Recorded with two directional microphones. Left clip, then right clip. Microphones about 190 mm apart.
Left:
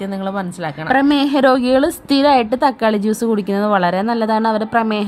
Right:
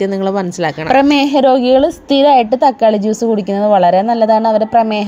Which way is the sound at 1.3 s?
5° left (ahead or behind).